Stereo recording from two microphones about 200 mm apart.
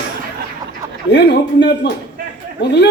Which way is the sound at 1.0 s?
60° left (ahead or behind).